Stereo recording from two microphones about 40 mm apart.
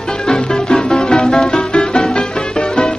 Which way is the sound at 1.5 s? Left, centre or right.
Left.